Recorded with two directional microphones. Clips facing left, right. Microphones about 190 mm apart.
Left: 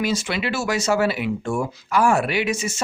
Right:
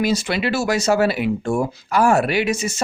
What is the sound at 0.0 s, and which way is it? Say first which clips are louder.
Speech: right 3 dB; 35° right (ahead or behind).